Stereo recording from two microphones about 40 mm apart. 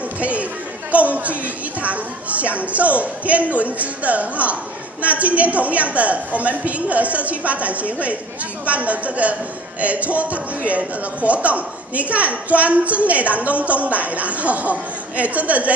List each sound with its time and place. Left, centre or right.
0.2 s chatter: right
0.9 s a woman's voice: right